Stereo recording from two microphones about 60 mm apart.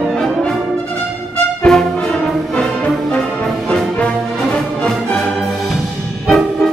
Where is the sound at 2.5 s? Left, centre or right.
Centre.